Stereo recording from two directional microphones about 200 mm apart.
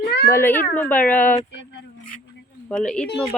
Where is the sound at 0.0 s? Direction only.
55° left (ahead or behind).